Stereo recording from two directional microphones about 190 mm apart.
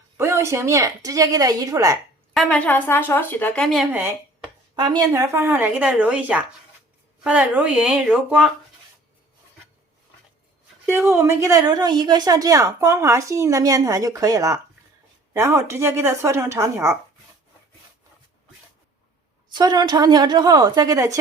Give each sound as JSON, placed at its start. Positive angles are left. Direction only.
{"t": 0.2, "sound": "a woman's voice", "side_deg": -15}
{"t": 2.3, "sound": "speech", "side_deg": 0}
{"t": 3.9, "sound": "speech", "side_deg": -10}
{"t": 4.8, "sound": "a woman's voice", "side_deg": -20}
{"t": 10.8, "sound": "a woman's voice", "side_deg": -15}
{"t": 19.5, "sound": "a woman's voice", "side_deg": -20}